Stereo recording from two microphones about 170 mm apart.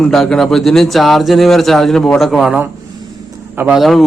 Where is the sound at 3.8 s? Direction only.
Centre (ahead or behind).